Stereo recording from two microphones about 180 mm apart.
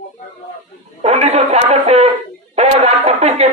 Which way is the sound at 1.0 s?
35° right (ahead or behind).